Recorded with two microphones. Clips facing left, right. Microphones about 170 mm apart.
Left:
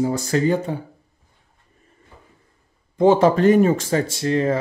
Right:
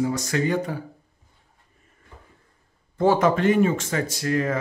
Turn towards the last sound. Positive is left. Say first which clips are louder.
# left 4 dB
turn(degrees=25)  # may be behind; listen again after turning